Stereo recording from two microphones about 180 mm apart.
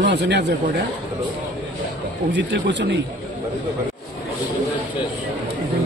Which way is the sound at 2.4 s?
75° right (ahead or behind).